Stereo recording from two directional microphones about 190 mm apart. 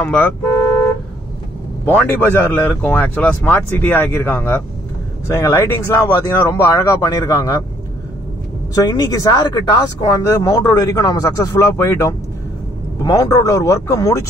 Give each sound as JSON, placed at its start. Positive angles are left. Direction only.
{"t": 0.0, "sound": "speech", "side_deg": 10}
{"t": 1.9, "sound": "speech", "side_deg": 10}
{"t": 8.9, "sound": "speech", "side_deg": 20}